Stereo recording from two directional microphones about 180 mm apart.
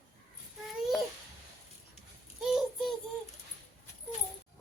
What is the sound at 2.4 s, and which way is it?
Child singing, centre (ahead or behind).